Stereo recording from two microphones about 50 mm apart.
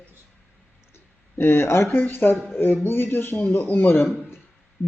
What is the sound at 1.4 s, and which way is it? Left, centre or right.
Speech, left.